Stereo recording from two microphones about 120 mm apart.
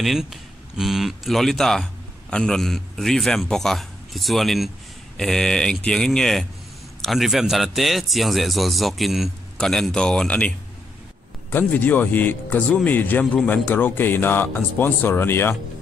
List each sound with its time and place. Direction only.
0.0 s speech: centre (ahead or behind)
11.5 s speech: 15° left (ahead or behind)